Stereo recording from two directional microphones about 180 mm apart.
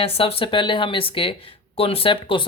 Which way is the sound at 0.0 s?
30° left (ahead or behind).